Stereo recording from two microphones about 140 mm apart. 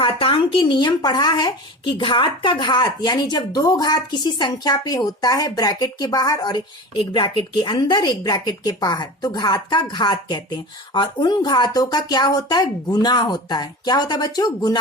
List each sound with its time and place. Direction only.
0.0 s speech: 40° left (ahead or behind)